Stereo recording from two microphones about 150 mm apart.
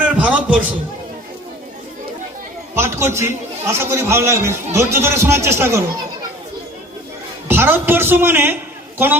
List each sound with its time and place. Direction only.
0.0 s a sound: 10° right (ahead or behind)
2.7 s a man's voice: 15° right (ahead or behind)
7.4 s a man's voice: 15° right (ahead or behind)